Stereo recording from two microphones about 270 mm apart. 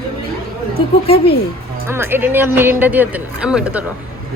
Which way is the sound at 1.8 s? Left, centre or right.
Centre.